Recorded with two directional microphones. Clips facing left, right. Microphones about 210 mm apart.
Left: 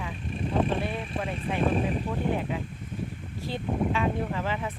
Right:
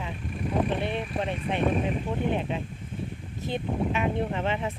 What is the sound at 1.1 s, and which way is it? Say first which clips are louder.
Speech: even; 25° right (ahead or behind).